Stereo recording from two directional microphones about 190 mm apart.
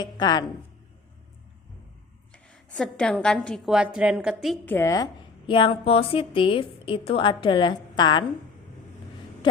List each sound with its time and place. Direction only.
0.0 s a woman's voice: 20° left (ahead or behind)
2.3 s a sound: 5° left (ahead or behind)
3.4 s a woman's voice: centre (ahead or behind)
4.6 s a woman's voice: 10° left (ahead or behind)
5.5 s a woman's voice: 25° left (ahead or behind)